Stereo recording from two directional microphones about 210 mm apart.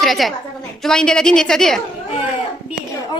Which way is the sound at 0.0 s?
Centre (ahead or behind).